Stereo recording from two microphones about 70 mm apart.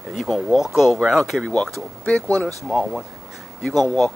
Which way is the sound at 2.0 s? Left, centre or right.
Centre.